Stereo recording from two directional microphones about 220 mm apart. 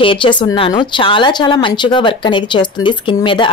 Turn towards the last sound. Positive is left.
turn(degrees=20)  # may be behind; listen again after turning